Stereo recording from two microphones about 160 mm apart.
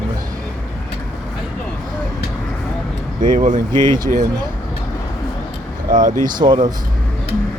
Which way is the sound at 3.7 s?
30° right (ahead or behind).